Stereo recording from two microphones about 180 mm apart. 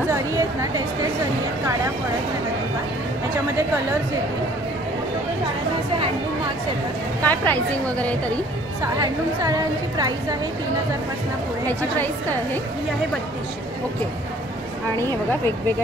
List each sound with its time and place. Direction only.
0.1 s a sound: 15° right (ahead or behind)
7.2 s a woman's voice: 10° left (ahead or behind)
9.0 s a woman's voice: 20° right (ahead or behind)
15.0 s a woman's voice: 15° left (ahead or behind)